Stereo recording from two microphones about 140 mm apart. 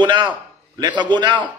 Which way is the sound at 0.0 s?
35° right (ahead or behind).